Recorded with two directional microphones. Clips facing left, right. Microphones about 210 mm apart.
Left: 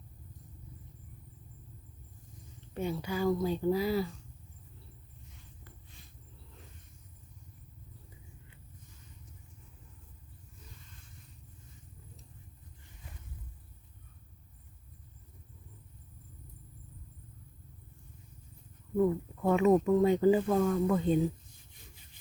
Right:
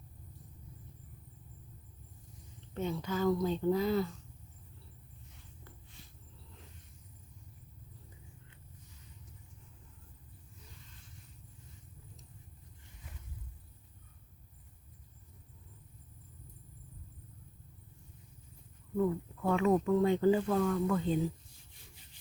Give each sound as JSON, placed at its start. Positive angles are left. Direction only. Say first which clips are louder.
{"t": 2.7, "sound": "speech", "louder": "left 1 dB", "side_deg": 10}
{"t": 18.9, "sound": "speech", "louder": "left 4 dB", "side_deg": 15}